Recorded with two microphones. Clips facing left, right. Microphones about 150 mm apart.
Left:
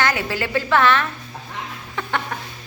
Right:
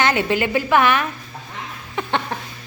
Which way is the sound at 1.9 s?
20° right (ahead or behind).